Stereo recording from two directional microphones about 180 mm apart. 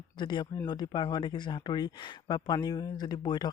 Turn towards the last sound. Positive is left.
turn(degrees=25)  # may be behind; listen again after turning